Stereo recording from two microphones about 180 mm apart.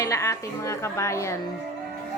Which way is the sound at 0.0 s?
15° left (ahead or behind).